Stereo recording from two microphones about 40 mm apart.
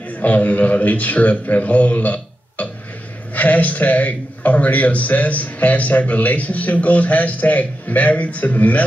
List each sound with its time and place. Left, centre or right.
0.2 s a man's voice: left
3.3 s a man's voice: left